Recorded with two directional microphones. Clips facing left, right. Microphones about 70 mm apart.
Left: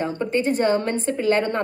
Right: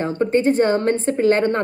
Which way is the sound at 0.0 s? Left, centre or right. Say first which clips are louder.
Right 5 dB; right.